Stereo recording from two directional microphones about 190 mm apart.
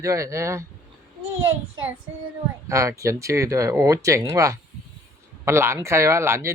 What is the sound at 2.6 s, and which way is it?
Speech, 15° right (ahead or behind).